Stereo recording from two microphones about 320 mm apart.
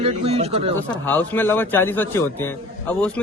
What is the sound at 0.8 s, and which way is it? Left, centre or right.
A man's voice, centre.